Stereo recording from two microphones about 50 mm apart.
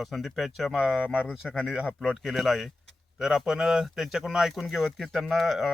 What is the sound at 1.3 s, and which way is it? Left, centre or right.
Speech, centre.